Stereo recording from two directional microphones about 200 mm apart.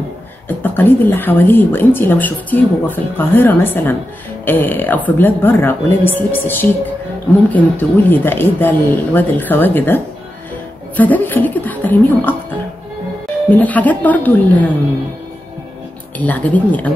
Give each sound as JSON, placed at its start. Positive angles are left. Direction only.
{"t": 0.5, "sound": "speech", "side_deg": 10}
{"t": 13.5, "sound": "speech", "side_deg": 10}
{"t": 16.2, "sound": "speech", "side_deg": 10}